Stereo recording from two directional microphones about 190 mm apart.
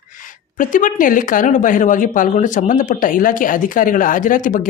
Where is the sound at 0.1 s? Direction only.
45° left (ahead or behind).